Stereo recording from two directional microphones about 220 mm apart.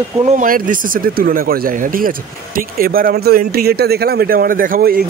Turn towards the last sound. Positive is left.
turn(degrees=-45)  # may be behind; listen again after turning